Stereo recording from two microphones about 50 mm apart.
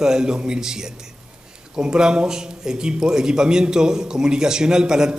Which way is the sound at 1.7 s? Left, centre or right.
Centre.